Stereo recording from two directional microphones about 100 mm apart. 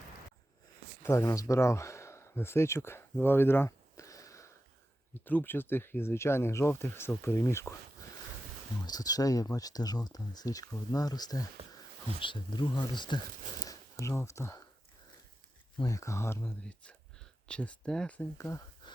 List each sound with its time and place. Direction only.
1.0 s speech: 25° left (ahead or behind)
5.2 s speech: 20° left (ahead or behind)
8.9 s speech: 40° left (ahead or behind)
12.2 s speech: 55° left (ahead or behind)
14.0 s speech: 30° left (ahead or behind)
15.8 s speech: 35° left (ahead or behind)
16.4 s speech: 10° left (ahead or behind)
18.3 s speech: 30° left (ahead or behind)
18.8 s a sound: 45° left (ahead or behind)